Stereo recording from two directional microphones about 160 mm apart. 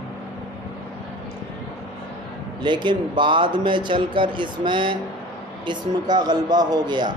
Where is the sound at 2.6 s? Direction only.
30° right (ahead or behind).